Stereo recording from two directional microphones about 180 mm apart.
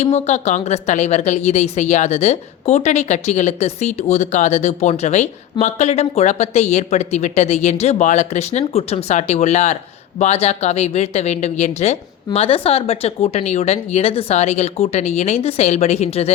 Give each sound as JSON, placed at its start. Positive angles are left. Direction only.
{"t": 0.0, "sound": "a woman's voice", "side_deg": 40}